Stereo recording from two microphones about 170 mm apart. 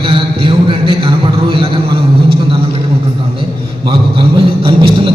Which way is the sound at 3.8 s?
30° right (ahead or behind).